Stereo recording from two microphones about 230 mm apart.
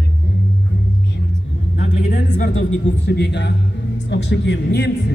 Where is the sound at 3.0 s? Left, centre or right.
Left.